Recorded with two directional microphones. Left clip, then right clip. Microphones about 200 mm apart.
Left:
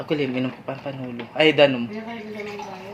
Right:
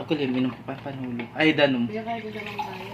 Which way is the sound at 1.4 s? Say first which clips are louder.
Left 5 dB; 25° left (ahead or behind).